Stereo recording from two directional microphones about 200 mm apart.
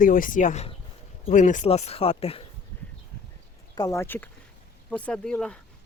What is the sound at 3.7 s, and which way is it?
Speech, 15° left (ahead or behind).